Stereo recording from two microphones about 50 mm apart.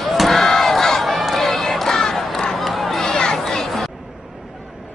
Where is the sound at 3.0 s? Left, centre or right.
Centre.